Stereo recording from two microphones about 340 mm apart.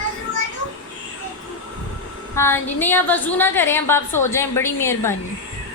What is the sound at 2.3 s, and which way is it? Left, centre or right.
A woman's voice, centre.